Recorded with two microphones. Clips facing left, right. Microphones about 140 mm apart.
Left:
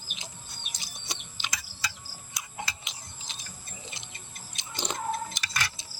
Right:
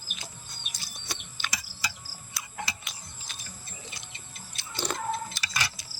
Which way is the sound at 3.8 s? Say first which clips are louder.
Left 1 dB; 20° left (ahead or behind).